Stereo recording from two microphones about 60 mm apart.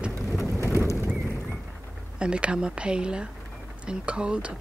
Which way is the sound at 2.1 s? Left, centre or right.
Centre.